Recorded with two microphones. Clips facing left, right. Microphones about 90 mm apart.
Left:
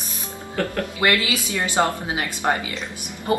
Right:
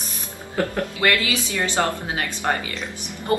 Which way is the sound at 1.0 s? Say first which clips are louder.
Left 1 dB; 20° left (ahead or behind).